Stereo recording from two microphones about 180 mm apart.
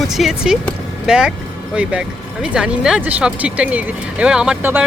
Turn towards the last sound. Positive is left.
turn(degrees=-5)  # may be behind; listen again after turning